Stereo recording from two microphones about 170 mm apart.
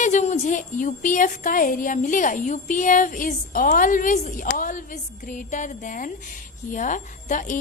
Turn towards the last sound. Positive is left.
turn(degrees=50)  # may be behind; listen again after turning